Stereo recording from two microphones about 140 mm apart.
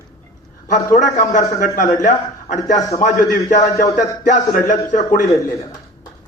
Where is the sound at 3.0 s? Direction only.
65° left (ahead or behind).